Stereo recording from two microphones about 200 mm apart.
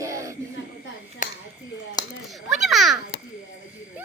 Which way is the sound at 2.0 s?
20° left (ahead or behind).